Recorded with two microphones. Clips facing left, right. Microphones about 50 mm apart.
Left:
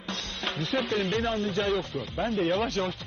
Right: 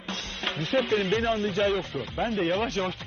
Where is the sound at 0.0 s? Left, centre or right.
Right.